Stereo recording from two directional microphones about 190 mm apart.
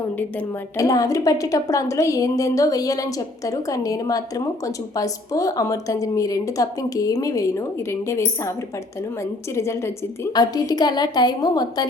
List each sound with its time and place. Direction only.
0.2 s a woman's voice: 15° left (ahead or behind)
9.6 s a woman's voice: 15° left (ahead or behind)